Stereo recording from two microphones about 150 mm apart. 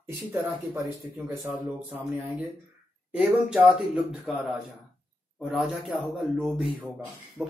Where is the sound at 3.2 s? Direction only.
10° right (ahead or behind).